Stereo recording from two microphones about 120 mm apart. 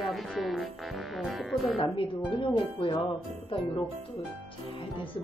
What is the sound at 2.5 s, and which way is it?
Speech, 40° left (ahead or behind).